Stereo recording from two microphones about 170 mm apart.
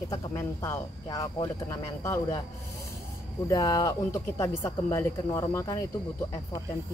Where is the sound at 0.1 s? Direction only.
15° left (ahead or behind).